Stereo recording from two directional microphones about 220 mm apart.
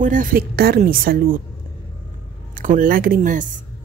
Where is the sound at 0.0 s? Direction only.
40° right (ahead or behind).